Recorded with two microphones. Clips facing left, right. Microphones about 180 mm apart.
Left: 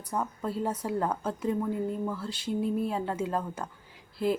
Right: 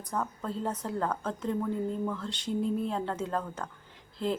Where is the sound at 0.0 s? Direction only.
10° left (ahead or behind).